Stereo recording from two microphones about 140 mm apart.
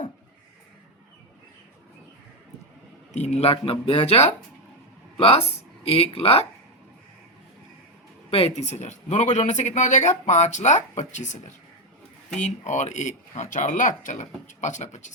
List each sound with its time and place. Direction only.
3.1 s speech: 55° left (ahead or behind)
8.3 s speech: 45° left (ahead or behind)
12.4 s speech: 60° left (ahead or behind)